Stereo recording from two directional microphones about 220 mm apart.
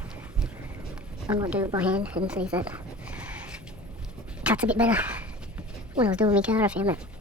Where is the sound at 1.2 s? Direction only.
15° right (ahead or behind).